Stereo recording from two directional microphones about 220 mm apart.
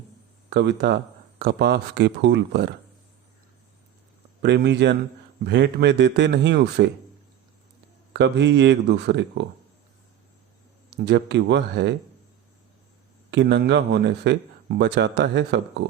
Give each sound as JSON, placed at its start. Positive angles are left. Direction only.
{"t": 0.5, "sound": "speech", "side_deg": -50}
{"t": 4.4, "sound": "speech", "side_deg": -50}
{"t": 8.1, "sound": "speech", "side_deg": -50}
{"t": 10.9, "sound": "speech", "side_deg": -50}
{"t": 13.3, "sound": "speech", "side_deg": -50}